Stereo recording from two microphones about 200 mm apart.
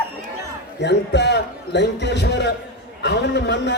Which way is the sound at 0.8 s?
60° left (ahead or behind).